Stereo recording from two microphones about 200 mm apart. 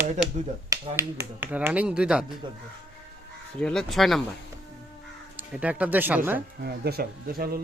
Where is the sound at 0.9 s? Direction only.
10° right (ahead or behind).